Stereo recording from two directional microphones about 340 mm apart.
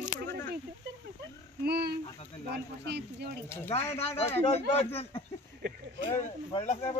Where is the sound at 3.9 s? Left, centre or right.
Centre.